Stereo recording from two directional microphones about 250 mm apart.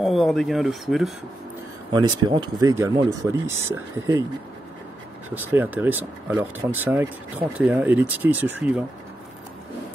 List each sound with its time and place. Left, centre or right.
0.0 s speech: centre
1.9 s speech: centre
5.3 s speech: centre